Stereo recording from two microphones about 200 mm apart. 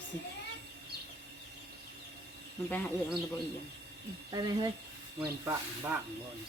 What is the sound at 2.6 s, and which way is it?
Speech, 5° left (ahead or behind).